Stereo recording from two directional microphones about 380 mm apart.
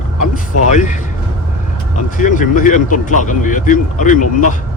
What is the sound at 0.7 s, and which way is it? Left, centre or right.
Speech, centre.